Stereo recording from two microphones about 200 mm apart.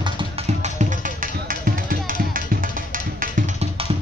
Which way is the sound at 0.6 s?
40° right (ahead or behind).